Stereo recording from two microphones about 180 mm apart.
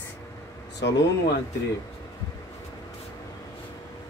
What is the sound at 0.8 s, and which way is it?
Speech, 80° left.